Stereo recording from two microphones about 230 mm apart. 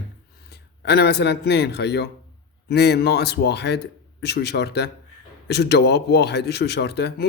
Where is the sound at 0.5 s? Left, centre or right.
Left.